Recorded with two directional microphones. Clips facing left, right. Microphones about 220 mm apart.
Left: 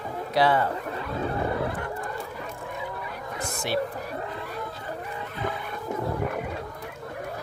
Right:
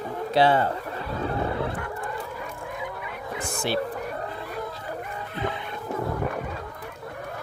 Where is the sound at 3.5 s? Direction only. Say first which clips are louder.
Right 3 dB; 30° right (ahead or behind).